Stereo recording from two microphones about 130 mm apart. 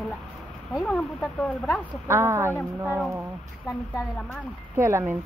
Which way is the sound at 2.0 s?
20° right (ahead or behind).